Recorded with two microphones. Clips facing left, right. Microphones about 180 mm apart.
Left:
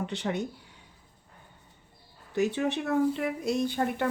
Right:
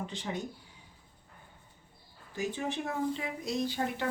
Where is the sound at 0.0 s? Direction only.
70° left (ahead or behind).